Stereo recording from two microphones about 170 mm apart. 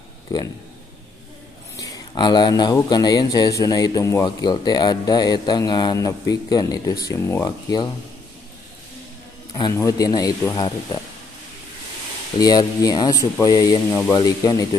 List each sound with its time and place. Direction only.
0.3 s speech: 20° left (ahead or behind)
1.8 s speech: 25° left (ahead or behind)
9.5 s a man's voice: 25° left (ahead or behind)
12.4 s speech: 20° left (ahead or behind)